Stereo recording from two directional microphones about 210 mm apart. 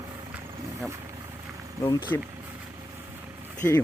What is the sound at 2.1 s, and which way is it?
Speech, 10° left (ahead or behind).